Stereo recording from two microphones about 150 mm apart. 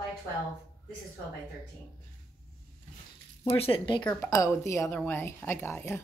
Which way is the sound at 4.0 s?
10° left (ahead or behind).